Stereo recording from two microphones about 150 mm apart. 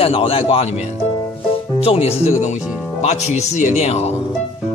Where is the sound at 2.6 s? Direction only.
5° right (ahead or behind).